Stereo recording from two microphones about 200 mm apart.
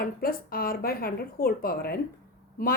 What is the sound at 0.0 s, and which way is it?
Speech, 45° left (ahead or behind).